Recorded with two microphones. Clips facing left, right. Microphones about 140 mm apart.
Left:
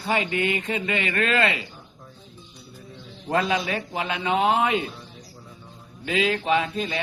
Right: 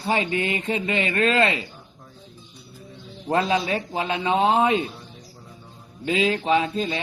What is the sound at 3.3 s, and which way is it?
Speech, 30° right (ahead or behind).